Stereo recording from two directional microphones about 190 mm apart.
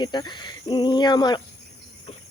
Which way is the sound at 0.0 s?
25° left (ahead or behind).